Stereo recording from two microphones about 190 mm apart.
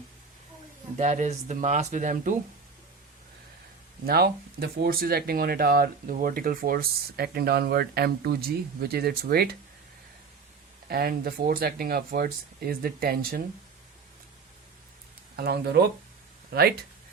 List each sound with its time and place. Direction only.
0.9 s speech: 40° right (ahead or behind)
4.0 s speech: 55° right (ahead or behind)
10.8 s speech: 50° right (ahead or behind)
15.4 s speech: 55° right (ahead or behind)